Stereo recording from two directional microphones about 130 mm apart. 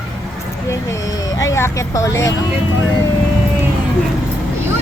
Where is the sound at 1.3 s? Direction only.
25° left (ahead or behind).